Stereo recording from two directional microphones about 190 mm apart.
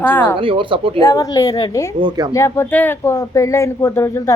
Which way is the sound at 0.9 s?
20° left (ahead or behind).